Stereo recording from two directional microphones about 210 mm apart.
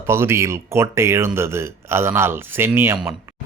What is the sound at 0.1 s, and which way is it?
Speech, 10° right (ahead or behind).